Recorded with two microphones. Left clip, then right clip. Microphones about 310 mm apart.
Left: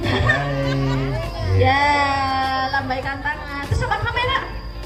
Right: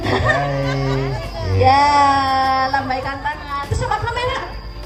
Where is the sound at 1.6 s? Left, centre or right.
Centre.